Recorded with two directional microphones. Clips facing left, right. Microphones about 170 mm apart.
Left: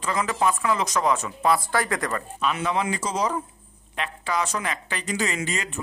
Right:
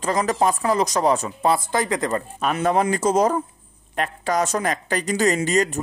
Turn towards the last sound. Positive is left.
turn(degrees=-40)  # may be behind; listen again after turning